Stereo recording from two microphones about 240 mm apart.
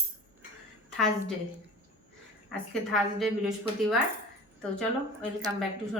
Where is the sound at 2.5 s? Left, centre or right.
Centre.